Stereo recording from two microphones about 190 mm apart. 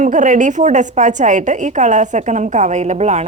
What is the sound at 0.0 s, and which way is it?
A woman's voice, 40° right (ahead or behind).